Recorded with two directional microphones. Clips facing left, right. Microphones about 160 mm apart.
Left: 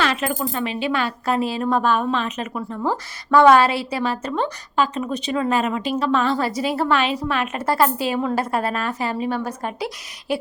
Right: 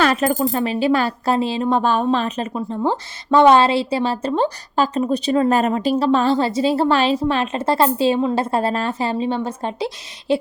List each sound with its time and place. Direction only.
0.0 s a woman's voice: 45° right (ahead or behind); by 10.3 s 25° right (ahead or behind)